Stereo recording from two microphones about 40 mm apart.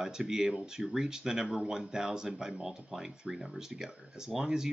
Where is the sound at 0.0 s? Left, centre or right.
Centre.